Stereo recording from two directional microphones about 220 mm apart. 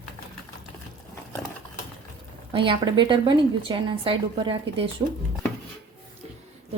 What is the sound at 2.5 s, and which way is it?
A woman's voice, 25° right (ahead or behind).